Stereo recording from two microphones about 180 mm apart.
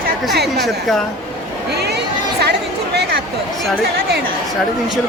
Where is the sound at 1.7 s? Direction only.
65° right (ahead or behind).